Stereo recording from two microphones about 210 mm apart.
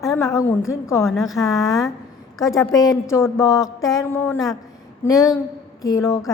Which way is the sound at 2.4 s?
15° left (ahead or behind).